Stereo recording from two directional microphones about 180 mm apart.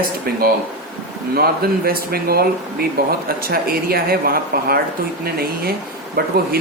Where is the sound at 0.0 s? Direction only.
55° right (ahead or behind).